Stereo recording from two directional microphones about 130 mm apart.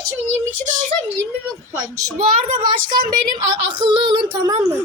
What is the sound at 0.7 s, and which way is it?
Speech, 70° right (ahead or behind).